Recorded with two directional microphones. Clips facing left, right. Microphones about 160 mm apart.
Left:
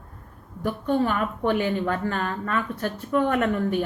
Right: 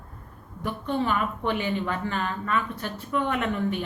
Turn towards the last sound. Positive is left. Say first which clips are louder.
# left 4 dB
turn(degrees=50)  # may be behind; listen again after turning